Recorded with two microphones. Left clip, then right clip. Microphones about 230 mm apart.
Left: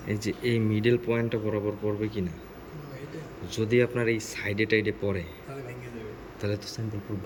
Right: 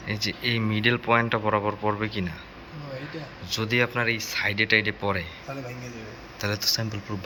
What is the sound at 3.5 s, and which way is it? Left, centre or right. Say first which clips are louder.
Speech: right 1 dB; centre.